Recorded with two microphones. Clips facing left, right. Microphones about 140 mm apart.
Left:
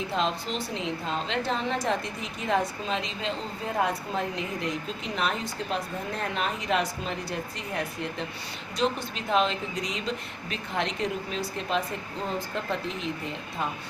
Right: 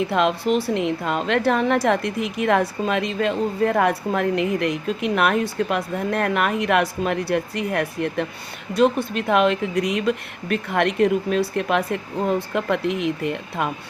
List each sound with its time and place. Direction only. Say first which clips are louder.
0.1 s a woman's voice: right 9 dB; 65° right (ahead or behind)